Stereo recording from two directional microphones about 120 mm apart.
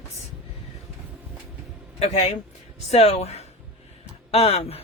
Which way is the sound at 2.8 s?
55° left (ahead or behind).